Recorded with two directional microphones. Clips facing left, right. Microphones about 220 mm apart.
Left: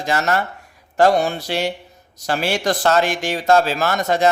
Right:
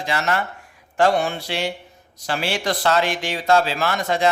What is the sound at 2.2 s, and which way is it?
Speech, 45° left (ahead or behind).